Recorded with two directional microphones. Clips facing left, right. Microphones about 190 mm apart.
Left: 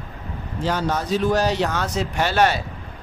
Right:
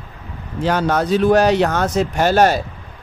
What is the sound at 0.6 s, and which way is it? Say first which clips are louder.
Speech: right 6 dB; 65° right (ahead or behind).